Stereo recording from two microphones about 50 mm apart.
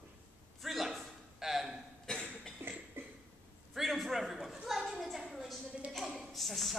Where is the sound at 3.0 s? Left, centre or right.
Right.